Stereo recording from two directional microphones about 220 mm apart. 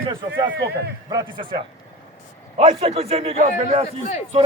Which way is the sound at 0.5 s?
50° right (ahead or behind).